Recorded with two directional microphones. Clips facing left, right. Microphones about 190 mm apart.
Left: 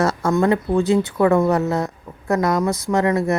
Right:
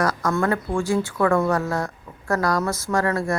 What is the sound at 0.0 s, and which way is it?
A woman's voice, 25° left (ahead or behind).